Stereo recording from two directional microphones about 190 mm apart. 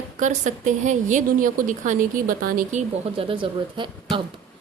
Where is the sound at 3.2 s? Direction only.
25° right (ahead or behind).